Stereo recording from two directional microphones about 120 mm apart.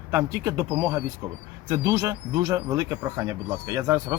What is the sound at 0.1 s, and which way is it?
Speech, 25° right (ahead or behind).